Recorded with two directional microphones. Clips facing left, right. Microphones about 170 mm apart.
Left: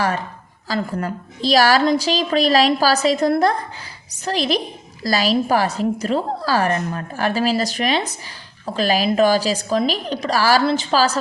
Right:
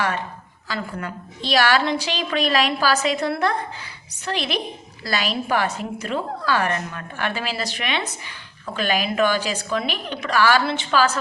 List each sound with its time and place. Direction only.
0.7 s a woman's voice: 40° left (ahead or behind)